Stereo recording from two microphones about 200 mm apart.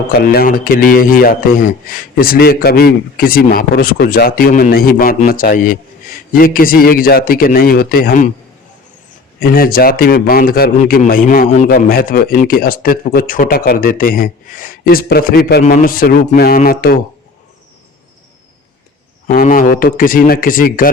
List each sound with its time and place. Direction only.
0.3 s a man's voice: 45° left (ahead or behind)
9.4 s a man's voice: 45° left (ahead or behind)
19.3 s a man's voice: 40° left (ahead or behind)